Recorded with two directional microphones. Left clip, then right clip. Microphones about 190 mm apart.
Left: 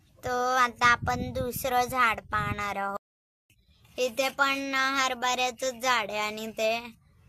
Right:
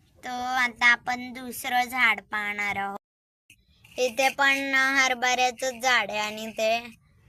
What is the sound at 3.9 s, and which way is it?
A woman's voice, 5° right (ahead or behind).